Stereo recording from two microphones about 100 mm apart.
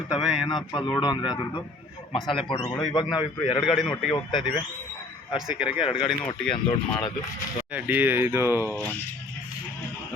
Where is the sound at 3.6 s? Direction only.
Centre (ahead or behind).